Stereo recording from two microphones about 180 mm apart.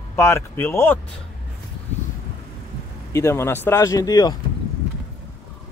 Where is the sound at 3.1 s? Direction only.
15° left (ahead or behind).